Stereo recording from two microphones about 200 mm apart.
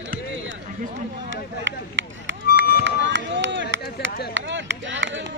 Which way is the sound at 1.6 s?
65° right (ahead or behind).